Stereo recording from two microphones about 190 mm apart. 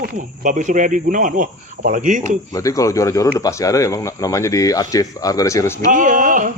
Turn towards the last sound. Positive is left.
turn(degrees=-45)  # may be behind; listen again after turning